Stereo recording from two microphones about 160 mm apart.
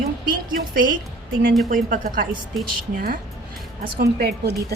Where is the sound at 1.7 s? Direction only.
55° right (ahead or behind).